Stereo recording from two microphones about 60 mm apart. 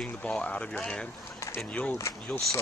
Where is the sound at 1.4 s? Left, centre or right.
Left.